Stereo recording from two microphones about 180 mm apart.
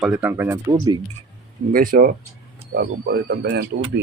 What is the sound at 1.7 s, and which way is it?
Speech, 50° right (ahead or behind).